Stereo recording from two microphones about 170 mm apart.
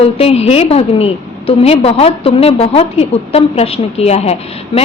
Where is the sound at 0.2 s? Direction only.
35° left (ahead or behind).